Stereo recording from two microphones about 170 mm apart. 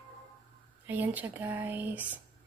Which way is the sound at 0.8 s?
10° right (ahead or behind).